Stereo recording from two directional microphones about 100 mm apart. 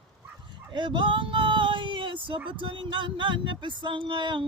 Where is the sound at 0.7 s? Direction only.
55° right (ahead or behind).